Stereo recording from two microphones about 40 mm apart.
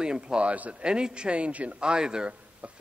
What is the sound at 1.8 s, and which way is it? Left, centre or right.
A man's voice, right.